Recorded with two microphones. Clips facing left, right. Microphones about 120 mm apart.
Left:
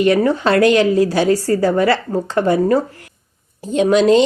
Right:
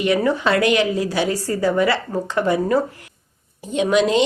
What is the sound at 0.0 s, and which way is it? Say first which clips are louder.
Speech: left 4 dB; 35° left (ahead or behind).